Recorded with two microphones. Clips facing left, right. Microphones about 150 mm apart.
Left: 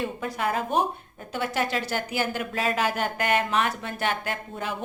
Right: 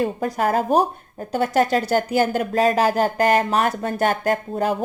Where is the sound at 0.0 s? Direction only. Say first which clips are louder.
Right 7 dB; 40° right (ahead or behind).